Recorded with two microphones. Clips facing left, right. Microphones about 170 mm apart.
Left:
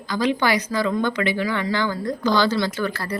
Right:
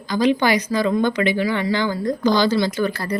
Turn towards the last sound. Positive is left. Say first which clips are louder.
# right 3 dB
turn(degrees=-20)  # may be behind; listen again after turning